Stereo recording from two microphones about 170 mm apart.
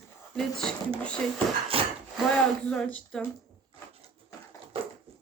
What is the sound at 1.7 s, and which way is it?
Wood, 35° right (ahead or behind).